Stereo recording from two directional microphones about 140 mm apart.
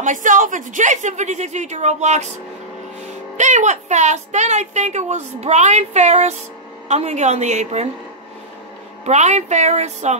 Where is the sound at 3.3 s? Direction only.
60° right (ahead or behind).